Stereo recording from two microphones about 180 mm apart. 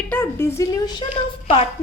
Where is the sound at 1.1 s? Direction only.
30° left (ahead or behind).